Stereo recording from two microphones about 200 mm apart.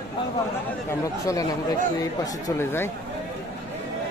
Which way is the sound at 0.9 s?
15° left (ahead or behind).